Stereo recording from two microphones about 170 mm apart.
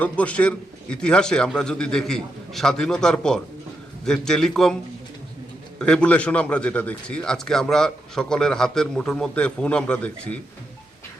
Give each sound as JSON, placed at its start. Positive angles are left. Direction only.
{"t": 0.0, "sound": "a man's voice", "side_deg": 10}
{"t": 5.8, "sound": "a man's voice", "side_deg": 5}